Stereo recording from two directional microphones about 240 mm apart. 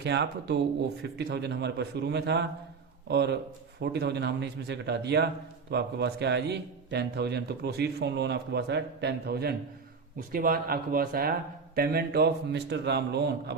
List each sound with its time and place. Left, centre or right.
0.0 s a man's voice: right